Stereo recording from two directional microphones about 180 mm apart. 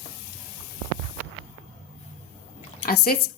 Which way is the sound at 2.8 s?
55° left (ahead or behind).